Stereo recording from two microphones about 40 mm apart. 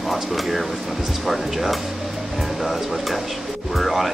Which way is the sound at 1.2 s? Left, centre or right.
Centre.